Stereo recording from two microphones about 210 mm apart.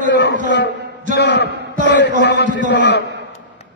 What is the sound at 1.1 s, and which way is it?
A man's voice, 55° left (ahead or behind).